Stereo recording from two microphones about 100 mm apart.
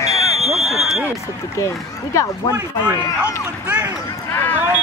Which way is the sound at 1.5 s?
30° left (ahead or behind).